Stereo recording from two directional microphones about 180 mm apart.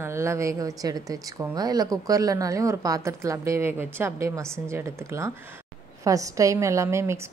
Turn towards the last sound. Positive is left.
turn(degrees=-15)  # may be behind; listen again after turning